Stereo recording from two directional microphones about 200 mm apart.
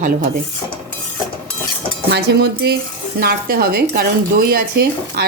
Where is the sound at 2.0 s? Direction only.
55° right (ahead or behind).